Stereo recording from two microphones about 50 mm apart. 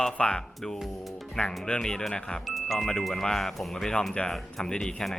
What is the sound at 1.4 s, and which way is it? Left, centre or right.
Speech, centre.